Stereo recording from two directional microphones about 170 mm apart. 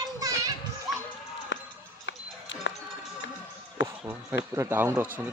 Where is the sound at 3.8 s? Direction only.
90° left.